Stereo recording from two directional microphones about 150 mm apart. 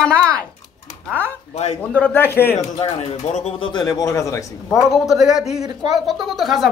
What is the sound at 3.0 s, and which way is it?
Speech, 45° left (ahead or behind).